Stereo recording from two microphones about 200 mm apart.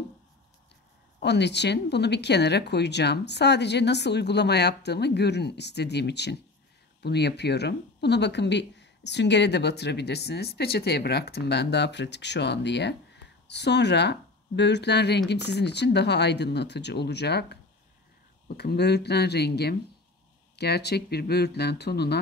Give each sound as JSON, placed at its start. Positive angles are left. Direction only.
{"t": 1.2, "sound": "speech", "side_deg": 60}
{"t": 18.6, "sound": "speech", "side_deg": 55}